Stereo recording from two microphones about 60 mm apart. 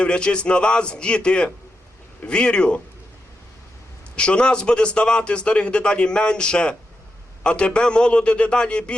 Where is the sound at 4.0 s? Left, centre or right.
Centre.